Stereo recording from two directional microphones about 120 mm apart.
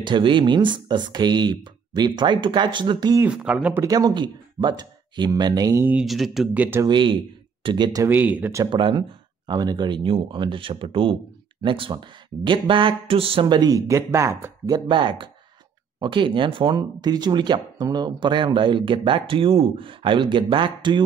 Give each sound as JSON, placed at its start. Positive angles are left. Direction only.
{"t": 0.0, "sound": "speech", "side_deg": -40}
{"t": 3.3, "sound": "speech", "side_deg": -10}
{"t": 3.8, "sound": "speech", "side_deg": -35}
{"t": 6.0, "sound": "speech", "side_deg": 0}
{"t": 6.5, "sound": "speech", "side_deg": -15}
{"t": 6.9, "sound": "speech", "side_deg": -45}
{"t": 8.0, "sound": "speech", "side_deg": -15}
{"t": 8.6, "sound": "speech", "side_deg": -40}
{"t": 14.7, "sound": "speech", "side_deg": -40}